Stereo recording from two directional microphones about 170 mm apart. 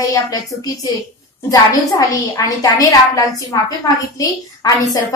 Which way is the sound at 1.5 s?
20° left (ahead or behind).